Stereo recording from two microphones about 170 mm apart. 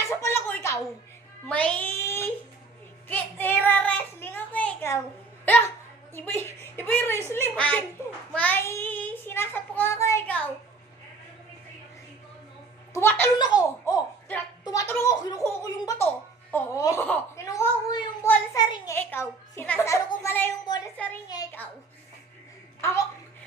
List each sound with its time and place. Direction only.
0.0 s a sound: 15° left (ahead or behind)
1.5 s a child's voice: 5° left (ahead or behind)
3.1 s child singing: 10° left (ahead or behind)
5.5 s a sound: 10° left (ahead or behind)
6.1 s speech: 10° left (ahead or behind)
12.9 s a child's voice: 15° left (ahead or behind)
13.4 s a child's voice: 25° left (ahead or behind)
16.5 s speech: 15° left (ahead or behind)
18.9 s speech: 15° left (ahead or behind)
20.7 s a woman's voice: 25° left (ahead or behind)
21.6 s speech: 10° left (ahead or behind)